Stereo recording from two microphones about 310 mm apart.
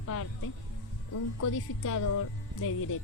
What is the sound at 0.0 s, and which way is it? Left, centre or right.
Music, left.